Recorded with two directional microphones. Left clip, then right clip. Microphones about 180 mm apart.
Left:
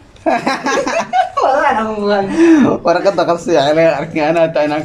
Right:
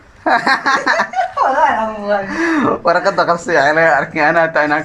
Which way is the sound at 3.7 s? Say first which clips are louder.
Even; 35° left (ahead or behind).